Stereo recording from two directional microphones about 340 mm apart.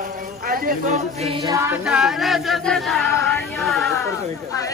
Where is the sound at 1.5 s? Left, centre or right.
Centre.